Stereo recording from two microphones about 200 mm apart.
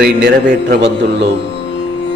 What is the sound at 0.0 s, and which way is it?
Speech, 55° right (ahead or behind).